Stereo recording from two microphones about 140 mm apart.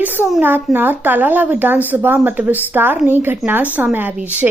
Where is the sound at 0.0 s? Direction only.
15° right (ahead or behind).